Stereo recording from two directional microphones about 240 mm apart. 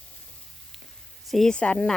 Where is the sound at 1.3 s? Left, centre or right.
Centre.